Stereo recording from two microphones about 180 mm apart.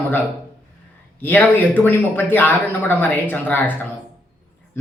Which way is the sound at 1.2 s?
10° left (ahead or behind).